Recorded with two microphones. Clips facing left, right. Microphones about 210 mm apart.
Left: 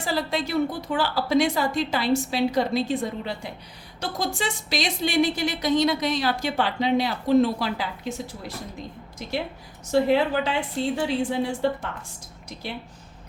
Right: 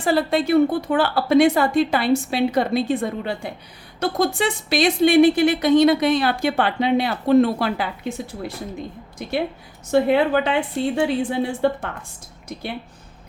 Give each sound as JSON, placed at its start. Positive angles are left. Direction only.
{"t": 0.0, "sound": "speech", "side_deg": -55}
{"t": 9.9, "sound": "speech", "side_deg": -55}